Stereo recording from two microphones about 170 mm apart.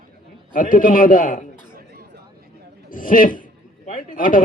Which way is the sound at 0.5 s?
50° left (ahead or behind).